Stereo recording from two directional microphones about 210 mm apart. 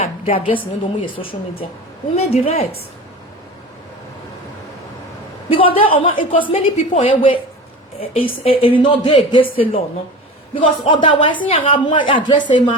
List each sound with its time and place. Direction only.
0.0 s a sound: 30° left (ahead or behind)
1.2 s a woman's voice: 25° left (ahead or behind)
5.5 s a woman's voice: 25° left (ahead or behind)